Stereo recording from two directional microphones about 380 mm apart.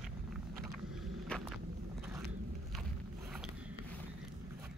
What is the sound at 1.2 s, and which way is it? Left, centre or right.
Walk, centre.